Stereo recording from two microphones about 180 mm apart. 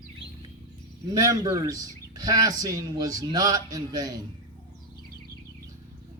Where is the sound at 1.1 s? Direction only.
20° right (ahead or behind).